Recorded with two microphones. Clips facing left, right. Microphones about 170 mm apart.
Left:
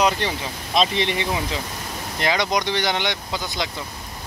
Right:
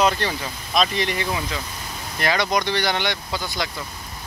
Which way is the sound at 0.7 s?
25° left (ahead or behind).